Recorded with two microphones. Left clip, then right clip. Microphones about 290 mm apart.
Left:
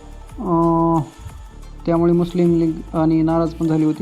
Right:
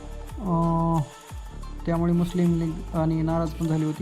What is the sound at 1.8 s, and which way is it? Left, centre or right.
Speech, centre.